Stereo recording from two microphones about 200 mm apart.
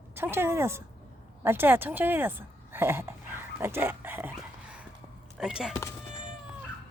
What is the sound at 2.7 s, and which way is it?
Dog, 10° right (ahead or behind).